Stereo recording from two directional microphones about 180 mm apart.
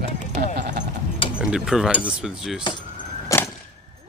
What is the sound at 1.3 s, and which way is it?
Speech, 5° right (ahead or behind).